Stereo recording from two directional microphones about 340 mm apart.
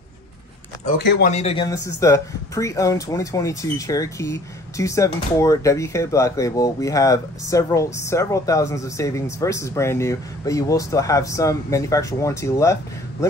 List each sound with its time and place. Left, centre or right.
0.8 s speech: left
1.3 s speech: centre